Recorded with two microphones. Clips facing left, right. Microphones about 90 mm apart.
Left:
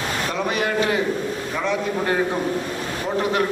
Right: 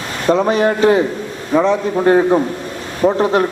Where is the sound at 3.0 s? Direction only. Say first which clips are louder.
Right 12 dB; 90° right.